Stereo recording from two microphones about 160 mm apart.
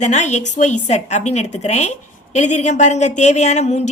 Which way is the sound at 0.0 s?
45° left (ahead or behind).